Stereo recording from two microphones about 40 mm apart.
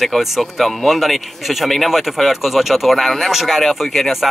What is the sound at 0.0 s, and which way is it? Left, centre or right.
Speech, centre.